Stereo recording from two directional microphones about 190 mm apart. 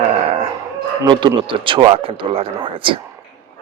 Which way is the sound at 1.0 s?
25° right (ahead or behind).